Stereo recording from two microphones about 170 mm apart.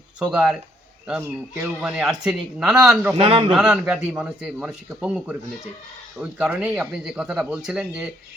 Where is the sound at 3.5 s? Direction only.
5° right (ahead or behind).